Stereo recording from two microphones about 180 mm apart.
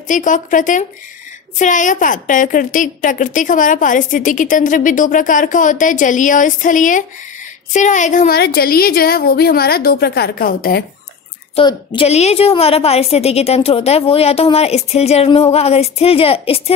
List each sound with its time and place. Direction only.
0.1 s a woman's voice: 45° left (ahead or behind)
8.4 s a woman's voice: 55° left (ahead or behind)
11.5 s a woman's voice: 30° left (ahead or behind)